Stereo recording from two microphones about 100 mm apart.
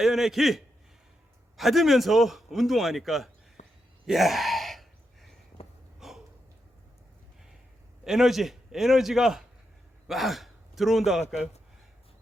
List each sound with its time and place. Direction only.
0.0 s a man's voice: 5° right (ahead or behind)
4.0 s gasp: centre (ahead or behind)
6.0 s a sound: 5° right (ahead or behind)
8.0 s a man's voice: 5° right (ahead or behind)